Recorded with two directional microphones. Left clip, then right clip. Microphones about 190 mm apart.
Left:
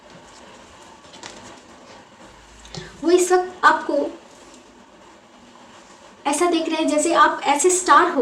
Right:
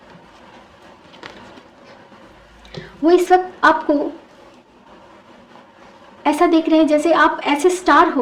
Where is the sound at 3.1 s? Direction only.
55° right (ahead or behind).